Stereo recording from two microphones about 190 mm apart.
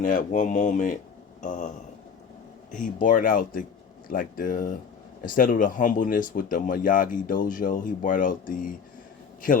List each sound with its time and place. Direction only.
0.0 s speech: 45° left (ahead or behind)
2.7 s speech: 45° left (ahead or behind)